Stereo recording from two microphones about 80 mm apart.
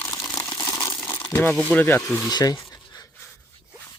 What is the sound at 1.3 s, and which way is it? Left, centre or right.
Speech, left.